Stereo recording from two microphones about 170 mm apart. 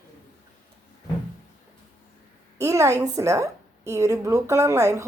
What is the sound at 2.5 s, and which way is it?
A woman's voice, 15° right (ahead or behind).